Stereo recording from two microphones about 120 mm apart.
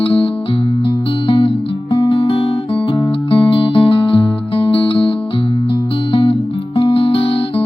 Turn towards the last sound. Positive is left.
turn(degrees=50)  # may be behind; listen again after turning